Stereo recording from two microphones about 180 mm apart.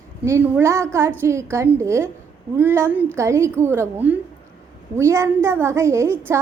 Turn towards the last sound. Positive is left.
turn(degrees=-15)  # may be behind; listen again after turning